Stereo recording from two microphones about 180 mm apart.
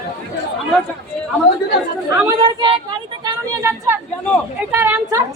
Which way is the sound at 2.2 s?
20° right (ahead or behind).